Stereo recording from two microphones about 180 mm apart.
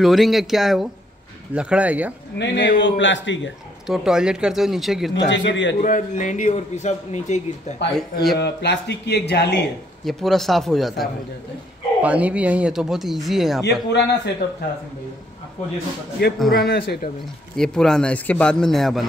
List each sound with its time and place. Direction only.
0.0 s speech: centre (ahead or behind)
2.3 s speech: 75° left (ahead or behind)
2.8 s a man's voice: 90° left
3.8 s speech: 5° right (ahead or behind)
5.3 s a man's voice: 90° left
5.8 s a man's voice: 45° left (ahead or behind)
7.9 s speech: centre (ahead or behind)
8.4 s speech: 70° left (ahead or behind)
10.0 s speech: centre (ahead or behind)
13.8 s speech: 70° left (ahead or behind)
16.2 s a man's voice: 60° left (ahead or behind)
17.6 s speech: 5° left (ahead or behind)